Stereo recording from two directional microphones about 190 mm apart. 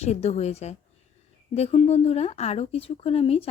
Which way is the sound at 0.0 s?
35° left (ahead or behind).